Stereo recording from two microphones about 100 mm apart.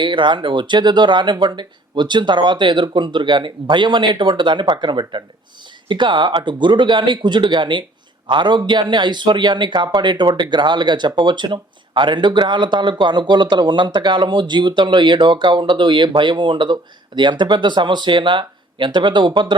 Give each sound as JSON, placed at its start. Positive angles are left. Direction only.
{"t": 0.0, "sound": "a man's voice", "side_deg": -50}